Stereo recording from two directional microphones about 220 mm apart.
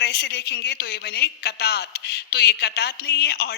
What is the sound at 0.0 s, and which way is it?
A woman's voice, 50° left (ahead or behind).